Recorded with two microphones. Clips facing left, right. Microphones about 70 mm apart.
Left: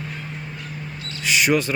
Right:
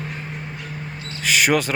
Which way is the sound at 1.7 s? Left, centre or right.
Right.